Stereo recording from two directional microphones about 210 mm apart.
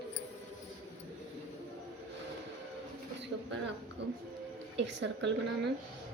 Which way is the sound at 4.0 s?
55° right (ahead or behind).